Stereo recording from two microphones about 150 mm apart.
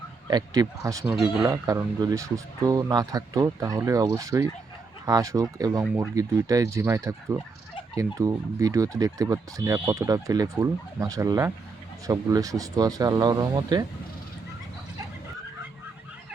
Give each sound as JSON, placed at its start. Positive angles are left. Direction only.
{"t": 0.3, "sound": "speech", "side_deg": -25}
{"t": 1.1, "sound": "speech", "side_deg": -5}
{"t": 1.5, "sound": "speech", "side_deg": -20}